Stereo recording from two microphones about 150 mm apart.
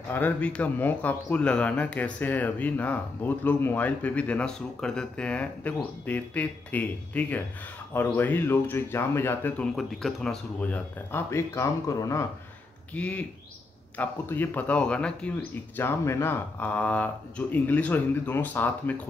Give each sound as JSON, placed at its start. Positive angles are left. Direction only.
{"t": 0.1, "sound": "speech", "side_deg": 10}
{"t": 9.8, "sound": "speech", "side_deg": 0}
{"t": 12.9, "sound": "speech", "side_deg": 10}